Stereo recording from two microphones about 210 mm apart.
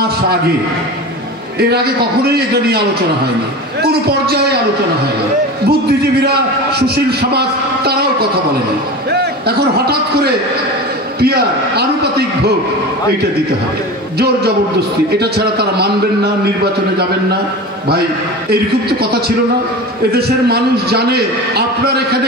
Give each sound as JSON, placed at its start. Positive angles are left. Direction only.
{"t": 1.6, "sound": "a man's voice", "side_deg": -50}
{"t": 3.8, "sound": "a man's voice", "side_deg": -50}
{"t": 5.7, "sound": "a man's voice", "side_deg": -50}
{"t": 14.1, "sound": "a man's voice", "side_deg": -50}
{"t": 20.1, "sound": "a man's voice", "side_deg": -50}